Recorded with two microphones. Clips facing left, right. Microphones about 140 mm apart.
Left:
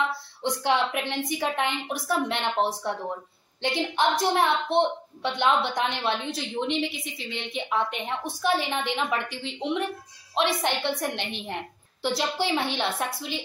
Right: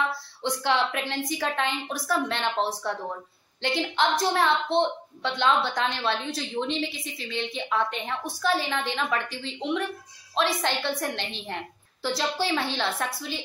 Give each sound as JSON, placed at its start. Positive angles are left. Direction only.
{"t": 0.4, "sound": "a woman's voice", "side_deg": 15}